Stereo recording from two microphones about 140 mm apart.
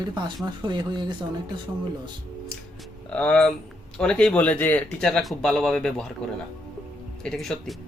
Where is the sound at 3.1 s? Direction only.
10° left (ahead or behind).